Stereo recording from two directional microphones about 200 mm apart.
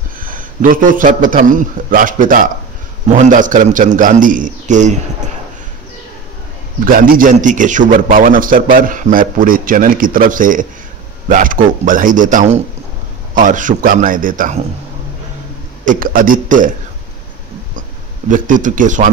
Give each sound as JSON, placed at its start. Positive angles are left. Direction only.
{"t": 0.2, "sound": "a man's voice", "side_deg": -45}
{"t": 6.8, "sound": "a man's voice", "side_deg": -45}
{"t": 15.8, "sound": "a man's voice", "side_deg": -40}
{"t": 18.3, "sound": "a man's voice", "side_deg": -40}